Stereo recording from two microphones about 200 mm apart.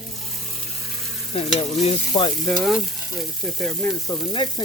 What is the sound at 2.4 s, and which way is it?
Speech, centre (ahead or behind).